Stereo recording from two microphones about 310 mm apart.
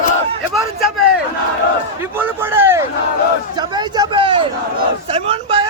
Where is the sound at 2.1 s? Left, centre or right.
Centre.